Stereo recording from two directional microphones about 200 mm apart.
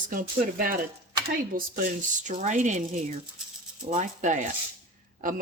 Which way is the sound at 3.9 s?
40° right (ahead or behind).